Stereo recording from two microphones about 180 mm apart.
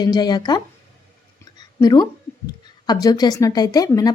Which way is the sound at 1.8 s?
20° left (ahead or behind).